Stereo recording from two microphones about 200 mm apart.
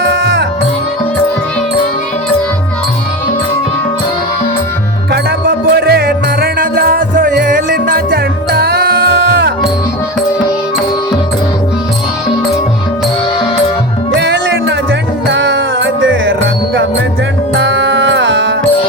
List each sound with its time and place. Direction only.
5.1 s music: 50° right (ahead or behind)
14.2 s music: 65° right (ahead or behind)
17.6 s music: 65° right (ahead or behind)